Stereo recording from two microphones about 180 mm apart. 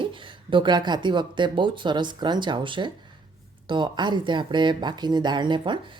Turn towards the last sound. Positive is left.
turn(degrees=-25)  # may be behind; listen again after turning